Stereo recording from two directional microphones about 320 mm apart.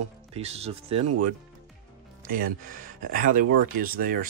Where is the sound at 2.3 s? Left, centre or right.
Right.